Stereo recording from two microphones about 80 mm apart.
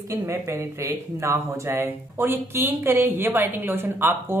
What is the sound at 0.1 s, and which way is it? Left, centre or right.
Speech, right.